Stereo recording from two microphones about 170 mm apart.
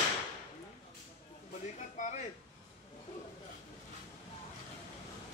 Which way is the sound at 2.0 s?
50° left (ahead or behind).